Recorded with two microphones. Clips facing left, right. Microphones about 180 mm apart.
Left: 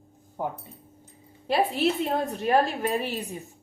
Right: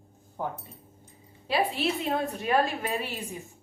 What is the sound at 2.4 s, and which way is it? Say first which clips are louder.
Speech: left 4 dB; 40° left (ahead or behind).